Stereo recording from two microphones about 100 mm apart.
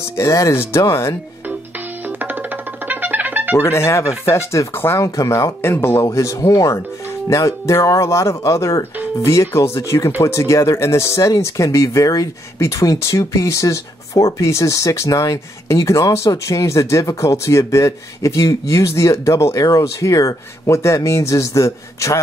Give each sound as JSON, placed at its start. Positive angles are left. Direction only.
{"t": 0.2, "sound": "speech", "side_deg": 30}
{"t": 2.0, "sound": "music", "side_deg": -20}
{"t": 3.5, "sound": "speech", "side_deg": 25}
{"t": 6.0, "sound": "speech", "side_deg": 35}